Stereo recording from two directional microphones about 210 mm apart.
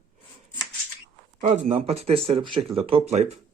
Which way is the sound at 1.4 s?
30° right (ahead or behind).